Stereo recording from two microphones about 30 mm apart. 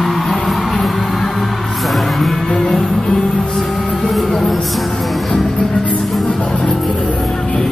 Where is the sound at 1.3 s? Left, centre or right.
Centre.